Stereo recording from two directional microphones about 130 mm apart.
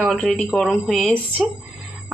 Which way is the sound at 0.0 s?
Centre (ahead or behind).